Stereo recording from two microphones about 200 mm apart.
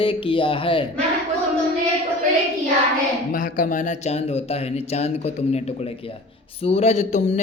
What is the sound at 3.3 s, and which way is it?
Speech, 40° left (ahead or behind).